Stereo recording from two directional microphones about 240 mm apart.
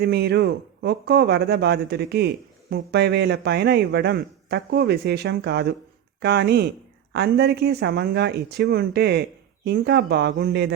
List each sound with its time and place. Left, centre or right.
0.0 s speech: right